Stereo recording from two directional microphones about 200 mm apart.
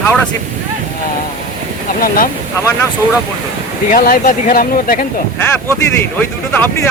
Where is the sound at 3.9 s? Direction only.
45° left (ahead or behind).